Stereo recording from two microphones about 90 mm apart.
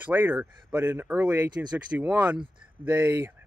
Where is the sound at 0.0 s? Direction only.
20° right (ahead or behind).